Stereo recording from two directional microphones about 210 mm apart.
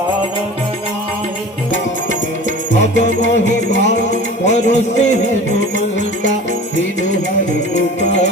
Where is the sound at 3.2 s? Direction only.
60° left (ahead or behind).